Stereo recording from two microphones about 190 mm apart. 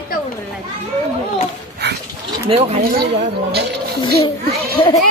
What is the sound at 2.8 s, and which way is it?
Speech, 50° right (ahead or behind).